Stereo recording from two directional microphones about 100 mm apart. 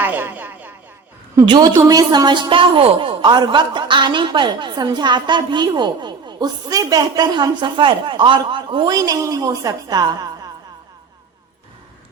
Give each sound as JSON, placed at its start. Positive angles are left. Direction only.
{"t": 0.0, "sound": "speech", "side_deg": -20}
{"t": 1.5, "sound": "a woman's voice", "side_deg": -45}
{"t": 9.0, "sound": "a woman's voice", "side_deg": -40}